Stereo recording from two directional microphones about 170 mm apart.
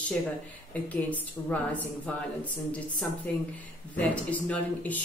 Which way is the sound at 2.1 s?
5° left (ahead or behind).